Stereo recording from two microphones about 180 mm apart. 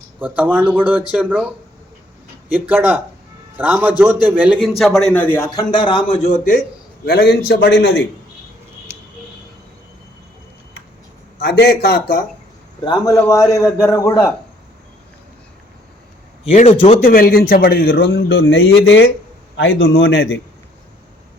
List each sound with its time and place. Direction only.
0.2 s a man's voice: 10° right (ahead or behind); by 5.6 s 15° left (ahead or behind)
5.7 s a man's voice: 25° left (ahead or behind)
7.0 s speech: 60° left (ahead or behind)
11.3 s speech: 65° left (ahead or behind)
12.8 s a man's voice: 25° left (ahead or behind)
16.5 s a man's voice: 35° left (ahead or behind)
17.1 s speech: 55° left (ahead or behind); by 19.0 s 80° left
19.5 s a man's voice: 90° left